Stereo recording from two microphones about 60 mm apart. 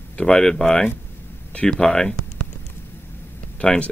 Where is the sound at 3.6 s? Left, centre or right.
Centre.